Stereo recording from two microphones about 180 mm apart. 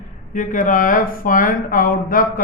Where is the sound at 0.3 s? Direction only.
45° left (ahead or behind).